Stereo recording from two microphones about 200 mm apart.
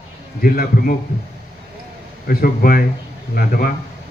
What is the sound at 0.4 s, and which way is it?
Speech, 45° left (ahead or behind).